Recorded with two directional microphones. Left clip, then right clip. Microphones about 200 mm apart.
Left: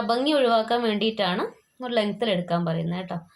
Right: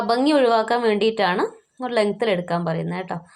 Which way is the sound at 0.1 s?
20° right (ahead or behind).